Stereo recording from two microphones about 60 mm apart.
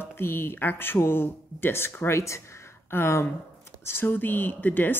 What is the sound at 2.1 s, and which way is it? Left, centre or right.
Speech, left.